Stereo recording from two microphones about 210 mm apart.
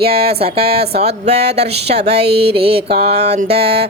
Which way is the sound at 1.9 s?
50° right (ahead or behind).